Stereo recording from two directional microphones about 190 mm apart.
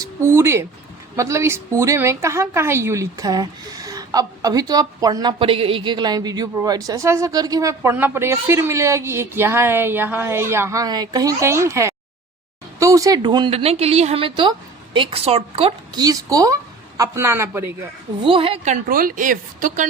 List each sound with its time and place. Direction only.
0.0 s a woman's voice: 15° right (ahead or behind); by 16.0 s 30° right (ahead or behind)
16.0 s a woman's voice: 20° right (ahead or behind)
18.2 s a woman's voice: 25° right (ahead or behind); by 19.9 s 45° right (ahead or behind)